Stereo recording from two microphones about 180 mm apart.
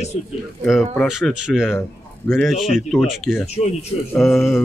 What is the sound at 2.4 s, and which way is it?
Speech, centre (ahead or behind).